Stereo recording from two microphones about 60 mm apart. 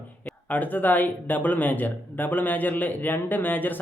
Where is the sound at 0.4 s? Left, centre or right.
Left.